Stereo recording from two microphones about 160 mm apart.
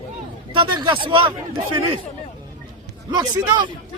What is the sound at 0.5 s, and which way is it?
Speech, 30° right (ahead or behind).